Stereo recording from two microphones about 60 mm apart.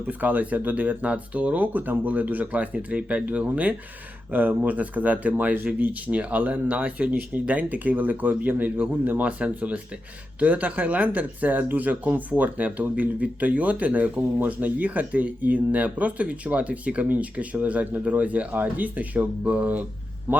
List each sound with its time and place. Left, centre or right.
0.1 s speech: right
20.3 s speech: right